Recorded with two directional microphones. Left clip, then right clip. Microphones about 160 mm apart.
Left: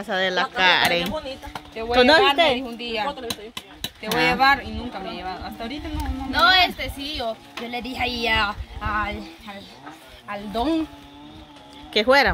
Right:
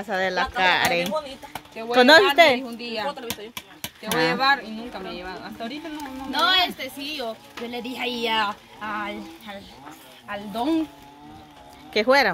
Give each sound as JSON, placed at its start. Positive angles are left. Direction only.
{"t": 0.0, "sound": "speech", "side_deg": 0}
{"t": 2.0, "sound": "a woman's voice", "side_deg": -20}
{"t": 2.6, "sound": "a woman's voice", "side_deg": 35}
{"t": 4.1, "sound": "speech", "side_deg": 0}
{"t": 4.4, "sound": "a woman's voice", "side_deg": 30}
{"t": 5.9, "sound": "speech", "side_deg": 0}
{"t": 10.2, "sound": "speech", "side_deg": 5}
{"t": 11.9, "sound": "speech", "side_deg": 0}